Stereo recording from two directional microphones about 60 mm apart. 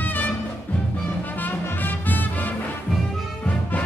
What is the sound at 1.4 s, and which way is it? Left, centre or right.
Music, left.